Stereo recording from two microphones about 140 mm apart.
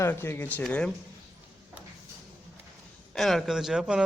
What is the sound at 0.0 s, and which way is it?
Speech, 15° left (ahead or behind).